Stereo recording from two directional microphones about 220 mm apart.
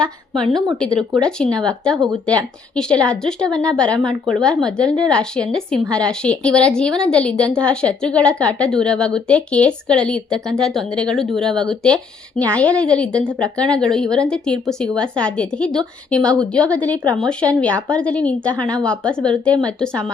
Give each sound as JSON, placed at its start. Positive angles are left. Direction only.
{"t": 0.0, "sound": "a woman's voice", "side_deg": 0}
{"t": 13.1, "sound": "speech", "side_deg": -15}
{"t": 13.6, "sound": "a woman's voice", "side_deg": 5}
{"t": 16.2, "sound": "speech", "side_deg": -15}
{"t": 16.5, "sound": "a woman's voice", "side_deg": 5}